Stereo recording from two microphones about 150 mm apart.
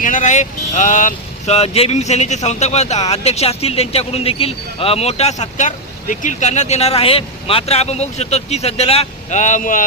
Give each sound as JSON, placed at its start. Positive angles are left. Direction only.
{"t": 0.0, "sound": "speech", "side_deg": 60}